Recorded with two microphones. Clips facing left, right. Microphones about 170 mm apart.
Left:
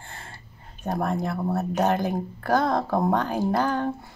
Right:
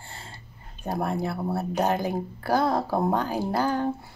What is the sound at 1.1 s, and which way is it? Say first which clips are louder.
A woman's voice: left 2 dB; 10° right (ahead or behind).